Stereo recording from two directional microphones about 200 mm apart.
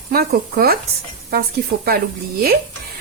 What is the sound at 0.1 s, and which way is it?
A woman's voice, 50° right (ahead or behind).